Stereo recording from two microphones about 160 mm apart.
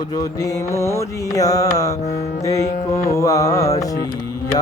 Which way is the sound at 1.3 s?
20° left (ahead or behind).